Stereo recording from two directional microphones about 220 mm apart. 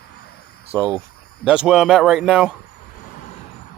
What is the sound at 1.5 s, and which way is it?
A man's voice, 5° right (ahead or behind).